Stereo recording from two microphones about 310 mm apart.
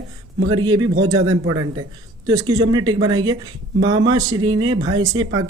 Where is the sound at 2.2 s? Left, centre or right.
Centre.